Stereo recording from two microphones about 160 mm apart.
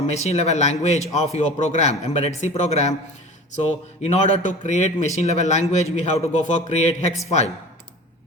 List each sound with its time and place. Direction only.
0.1 s a man's voice: 45° left (ahead or behind)
4.0 s a man's voice: 45° left (ahead or behind)